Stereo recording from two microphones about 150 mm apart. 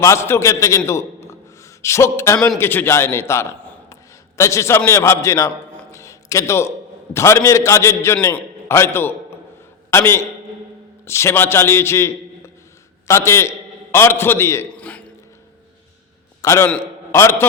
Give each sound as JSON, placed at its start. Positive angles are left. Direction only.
{"t": 0.0, "sound": "a man's voice", "side_deg": 20}
{"t": 0.9, "sound": "a sound", "side_deg": 20}
{"t": 2.6, "sound": "a man's voice", "side_deg": 15}
{"t": 16.4, "sound": "a man's voice", "side_deg": 20}
{"t": 16.6, "sound": "a man's voice", "side_deg": 10}